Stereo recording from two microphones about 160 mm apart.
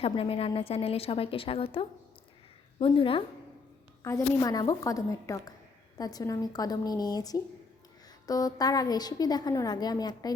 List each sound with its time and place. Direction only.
0.0 s a woman's voice: 35° left (ahead or behind)
4.0 s a woman's voice: 20° left (ahead or behind)